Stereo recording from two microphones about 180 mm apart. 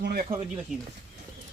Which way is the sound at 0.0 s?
60° right (ahead or behind).